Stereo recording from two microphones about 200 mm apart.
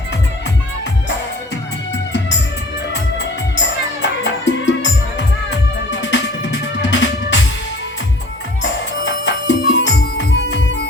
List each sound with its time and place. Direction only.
2.9 s music: 65° left (ahead or behind)
9.2 s music: 65° left (ahead or behind)